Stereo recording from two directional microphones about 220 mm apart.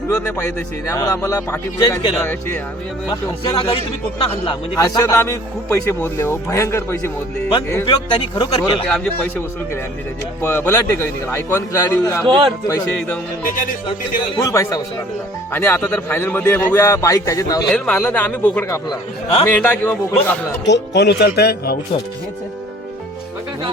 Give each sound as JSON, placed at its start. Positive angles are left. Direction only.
{"t": 0.9, "sound": "speech", "side_deg": 15}
{"t": 3.1, "sound": "speech", "side_deg": 25}
{"t": 4.8, "sound": "speech", "side_deg": 15}
{"t": 7.9, "sound": "speech", "side_deg": 20}
{"t": 10.4, "sound": "speech", "side_deg": 10}
{"t": 12.2, "sound": "speech", "side_deg": -20}
{"t": 12.6, "sound": "speech", "side_deg": 15}
{"t": 13.4, "sound": "speech", "side_deg": 35}
{"t": 14.2, "sound": "speech", "side_deg": 15}
{"t": 17.7, "sound": "speech", "side_deg": 5}
{"t": 18.9, "sound": "speech", "side_deg": 25}
{"t": 19.5, "sound": "speech", "side_deg": 5}
{"t": 20.7, "sound": "speech", "side_deg": 50}